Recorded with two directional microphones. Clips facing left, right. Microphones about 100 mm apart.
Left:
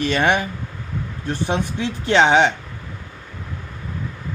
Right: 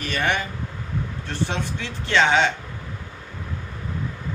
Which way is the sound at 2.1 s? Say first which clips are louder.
Left 4 dB; 20° left (ahead or behind).